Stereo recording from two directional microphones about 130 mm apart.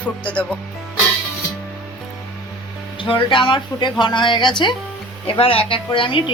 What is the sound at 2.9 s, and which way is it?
A woman's voice, 40° left (ahead or behind).